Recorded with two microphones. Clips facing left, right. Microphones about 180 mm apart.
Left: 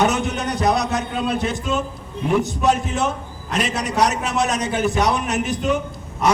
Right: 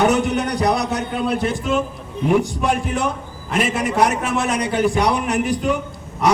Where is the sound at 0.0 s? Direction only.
20° left (ahead or behind).